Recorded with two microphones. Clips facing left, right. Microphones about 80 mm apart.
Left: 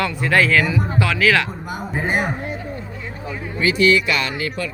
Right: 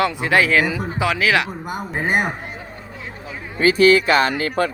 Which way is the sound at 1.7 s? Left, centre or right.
Right.